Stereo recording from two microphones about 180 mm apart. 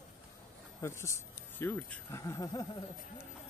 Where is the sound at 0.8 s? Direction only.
15° left (ahead or behind).